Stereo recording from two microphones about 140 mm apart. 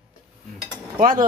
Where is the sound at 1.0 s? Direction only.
75° right (ahead or behind).